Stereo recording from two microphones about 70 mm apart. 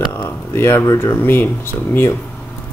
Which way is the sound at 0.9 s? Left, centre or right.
Left.